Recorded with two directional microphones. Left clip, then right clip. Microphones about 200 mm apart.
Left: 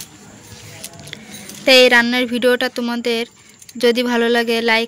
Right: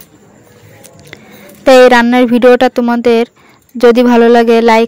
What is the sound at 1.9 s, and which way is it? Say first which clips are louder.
Speech: right 7 dB; 45° right (ahead or behind).